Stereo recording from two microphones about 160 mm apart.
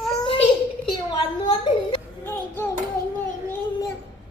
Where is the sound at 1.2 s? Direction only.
35° left (ahead or behind).